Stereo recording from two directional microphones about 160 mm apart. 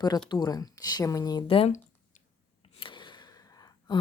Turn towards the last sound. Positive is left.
turn(degrees=25)  # may be behind; listen again after turning